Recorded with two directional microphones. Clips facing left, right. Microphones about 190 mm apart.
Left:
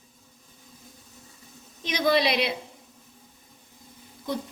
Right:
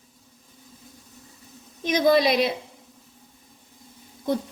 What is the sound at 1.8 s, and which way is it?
Speech, 50° right (ahead or behind).